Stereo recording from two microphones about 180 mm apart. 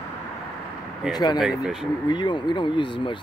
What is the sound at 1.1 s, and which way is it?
Speech, 25° left (ahead or behind).